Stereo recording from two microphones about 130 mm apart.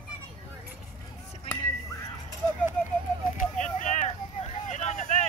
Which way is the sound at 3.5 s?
70° left (ahead or behind).